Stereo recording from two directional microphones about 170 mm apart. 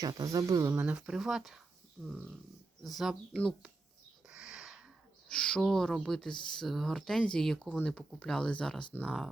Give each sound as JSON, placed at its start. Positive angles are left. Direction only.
{"t": 0.0, "sound": "speech", "side_deg": -20}
{"t": 0.7, "sound": "speech", "side_deg": -5}
{"t": 4.3, "sound": "a sound", "side_deg": -5}
{"t": 5.3, "sound": "speech", "side_deg": 5}